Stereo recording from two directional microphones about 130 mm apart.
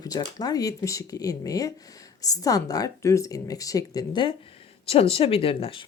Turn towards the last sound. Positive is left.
turn(degrees=45)  # may be behind; listen again after turning